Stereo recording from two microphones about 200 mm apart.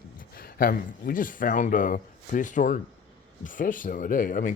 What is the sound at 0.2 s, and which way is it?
Speech, 45° left (ahead or behind).